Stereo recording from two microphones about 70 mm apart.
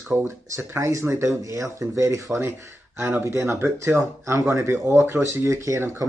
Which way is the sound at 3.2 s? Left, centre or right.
Right.